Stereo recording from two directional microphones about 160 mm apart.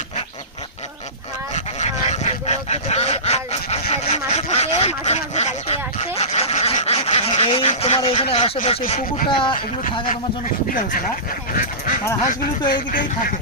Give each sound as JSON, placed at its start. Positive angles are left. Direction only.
{"t": 1.5, "sound": "goose", "side_deg": 45}
{"t": 4.4, "sound": "a sound", "side_deg": 45}
{"t": 7.7, "sound": "a man's voice", "side_deg": 40}
{"t": 9.0, "sound": "speech", "side_deg": 60}
{"t": 9.3, "sound": "a man's voice", "side_deg": 30}
{"t": 11.5, "sound": "speech", "side_deg": 60}